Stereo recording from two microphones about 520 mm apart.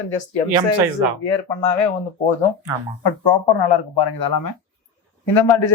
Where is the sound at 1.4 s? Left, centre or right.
Left.